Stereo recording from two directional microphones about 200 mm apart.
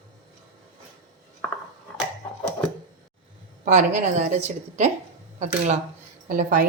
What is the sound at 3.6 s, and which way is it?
Speech, 40° right (ahead or behind).